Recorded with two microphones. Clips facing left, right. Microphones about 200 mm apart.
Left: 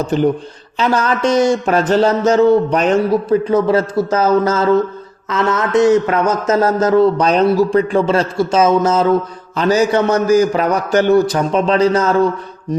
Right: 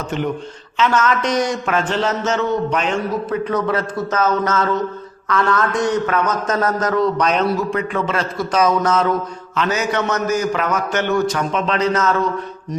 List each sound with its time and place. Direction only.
0.0 s a man's voice: 35° left (ahead or behind)